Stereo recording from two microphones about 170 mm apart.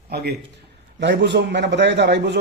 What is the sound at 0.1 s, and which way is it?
Speech, 65° right (ahead or behind).